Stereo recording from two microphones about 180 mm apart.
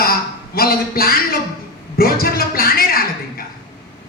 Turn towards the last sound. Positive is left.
turn(degrees=55)  # may be behind; listen again after turning